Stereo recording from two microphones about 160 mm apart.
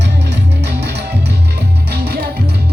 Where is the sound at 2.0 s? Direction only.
85° right.